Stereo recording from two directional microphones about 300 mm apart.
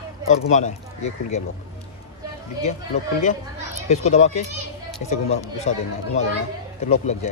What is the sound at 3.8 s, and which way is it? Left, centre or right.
Speech, left.